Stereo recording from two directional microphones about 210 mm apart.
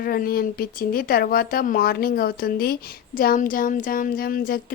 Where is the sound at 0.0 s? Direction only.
45° left (ahead or behind).